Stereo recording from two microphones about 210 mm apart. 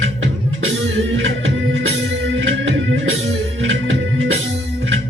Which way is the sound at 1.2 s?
65° right (ahead or behind).